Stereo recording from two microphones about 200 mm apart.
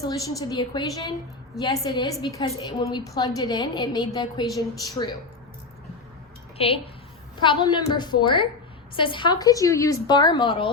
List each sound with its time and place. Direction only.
0.0 s a woman's voice: 20° left (ahead or behind)
6.6 s a woman's voice: 30° left (ahead or behind)